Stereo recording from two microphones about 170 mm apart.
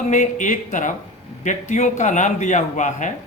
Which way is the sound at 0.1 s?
50° left (ahead or behind).